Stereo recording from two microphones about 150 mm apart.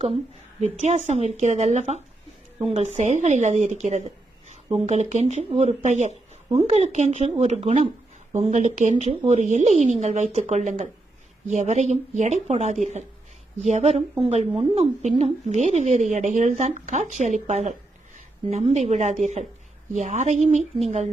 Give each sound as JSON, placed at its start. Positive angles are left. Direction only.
{"t": 0.8, "sound": "a woman's voice", "side_deg": -50}